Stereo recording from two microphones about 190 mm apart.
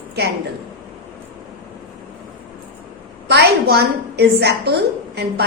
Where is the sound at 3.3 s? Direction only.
60° right (ahead or behind).